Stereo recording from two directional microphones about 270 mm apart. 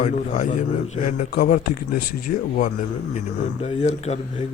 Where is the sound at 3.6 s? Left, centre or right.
Left.